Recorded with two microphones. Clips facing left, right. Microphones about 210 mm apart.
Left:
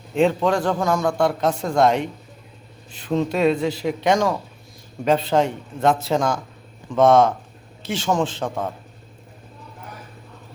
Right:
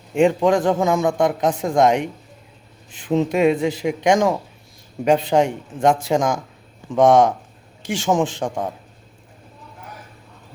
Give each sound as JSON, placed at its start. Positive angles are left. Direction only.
{"t": 0.1, "sound": "a man's voice", "side_deg": -15}